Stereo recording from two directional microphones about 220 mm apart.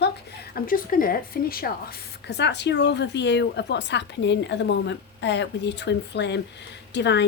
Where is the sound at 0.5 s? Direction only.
40° left (ahead or behind).